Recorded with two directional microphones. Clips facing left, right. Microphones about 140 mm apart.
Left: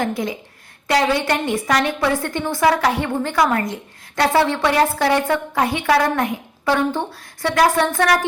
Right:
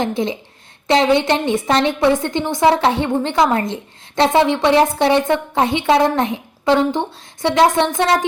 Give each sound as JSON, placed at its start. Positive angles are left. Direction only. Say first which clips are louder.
{"t": 0.0, "sound": "a woman's voice", "louder": "right 3 dB", "side_deg": -25}